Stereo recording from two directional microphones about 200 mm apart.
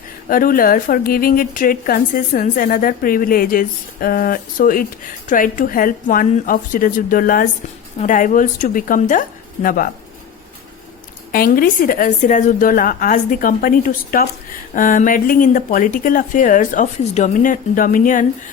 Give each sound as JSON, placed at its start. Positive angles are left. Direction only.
{"t": 0.3, "sound": "a woman's voice", "side_deg": 45}
{"t": 11.3, "sound": "a woman's voice", "side_deg": 45}